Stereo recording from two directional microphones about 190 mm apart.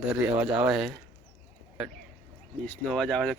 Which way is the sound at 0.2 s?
5° right (ahead or behind).